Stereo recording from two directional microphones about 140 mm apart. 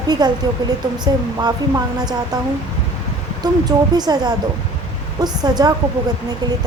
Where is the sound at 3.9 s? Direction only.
30° right (ahead or behind).